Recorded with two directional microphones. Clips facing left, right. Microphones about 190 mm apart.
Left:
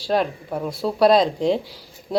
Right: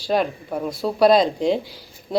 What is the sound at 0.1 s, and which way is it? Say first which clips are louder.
Speech: even; 5° right (ahead or behind).